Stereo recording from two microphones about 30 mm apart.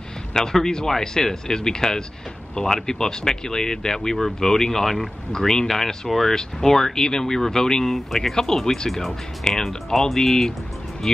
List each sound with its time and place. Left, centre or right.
0.3 s speech: centre
5.3 s speech: left
5.7 s speech: centre